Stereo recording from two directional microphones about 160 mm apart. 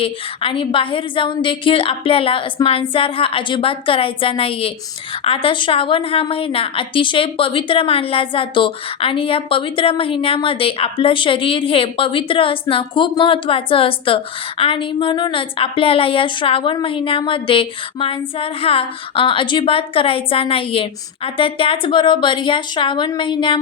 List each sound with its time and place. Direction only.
0.0 s a woman's voice: 35° left (ahead or behind)
2.6 s a woman's voice: 25° left (ahead or behind)
2.9 s a woman's voice: 35° left (ahead or behind)